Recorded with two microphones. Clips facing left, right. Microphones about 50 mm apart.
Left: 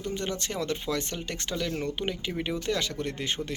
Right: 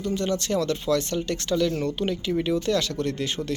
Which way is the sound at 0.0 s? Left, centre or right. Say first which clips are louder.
Right 6 dB; left.